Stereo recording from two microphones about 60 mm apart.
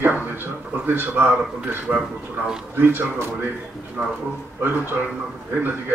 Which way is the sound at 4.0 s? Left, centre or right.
Centre.